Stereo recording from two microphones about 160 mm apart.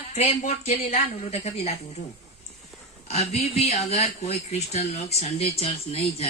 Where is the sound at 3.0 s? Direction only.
40° left (ahead or behind).